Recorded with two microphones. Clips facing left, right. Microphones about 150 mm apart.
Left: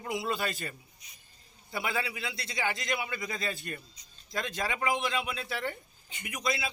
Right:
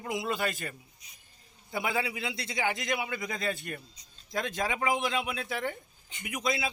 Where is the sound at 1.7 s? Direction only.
20° right (ahead or behind).